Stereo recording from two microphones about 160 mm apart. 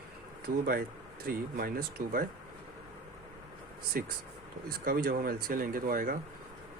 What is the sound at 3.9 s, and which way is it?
Speech, 60° right (ahead or behind).